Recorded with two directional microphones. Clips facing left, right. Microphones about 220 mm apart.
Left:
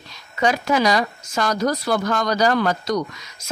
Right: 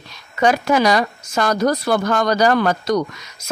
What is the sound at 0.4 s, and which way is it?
Speech, 55° right (ahead or behind).